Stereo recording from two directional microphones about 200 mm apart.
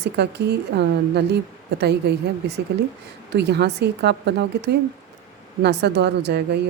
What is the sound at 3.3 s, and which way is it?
A woman's voice, 55° right (ahead or behind).